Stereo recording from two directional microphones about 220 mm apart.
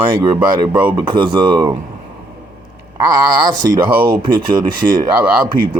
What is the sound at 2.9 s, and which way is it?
Speech, 15° right (ahead or behind).